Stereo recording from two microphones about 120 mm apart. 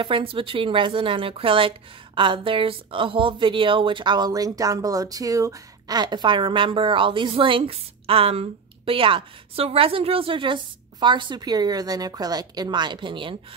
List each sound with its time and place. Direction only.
0.0 s a woman's voice: 45° right (ahead or behind)